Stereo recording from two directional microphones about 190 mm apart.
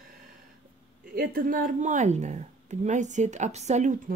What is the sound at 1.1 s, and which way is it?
Speech, 50° right (ahead or behind).